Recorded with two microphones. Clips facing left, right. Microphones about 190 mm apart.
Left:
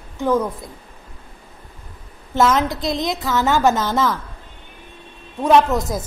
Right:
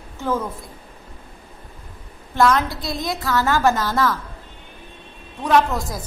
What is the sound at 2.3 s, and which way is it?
A woman's voice, 20° left (ahead or behind).